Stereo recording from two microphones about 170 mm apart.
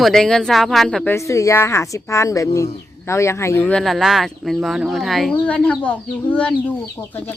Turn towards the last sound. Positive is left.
turn(degrees=10)  # may be behind; listen again after turning